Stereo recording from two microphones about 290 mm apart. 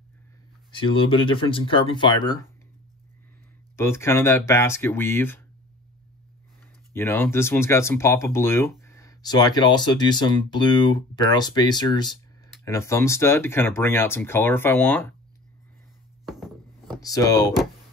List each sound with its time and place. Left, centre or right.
0.7 s speech: centre
3.7 s speech: centre
6.9 s speech: centre
16.3 s a sound: centre
17.0 s speech: centre